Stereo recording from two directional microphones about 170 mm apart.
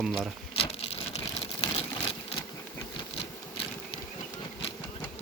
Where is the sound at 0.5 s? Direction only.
35° left (ahead or behind).